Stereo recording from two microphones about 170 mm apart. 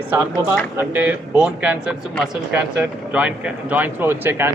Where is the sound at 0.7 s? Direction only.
10° right (ahead or behind).